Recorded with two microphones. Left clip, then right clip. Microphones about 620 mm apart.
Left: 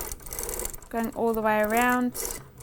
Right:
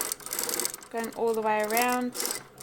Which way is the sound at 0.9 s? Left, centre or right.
Left.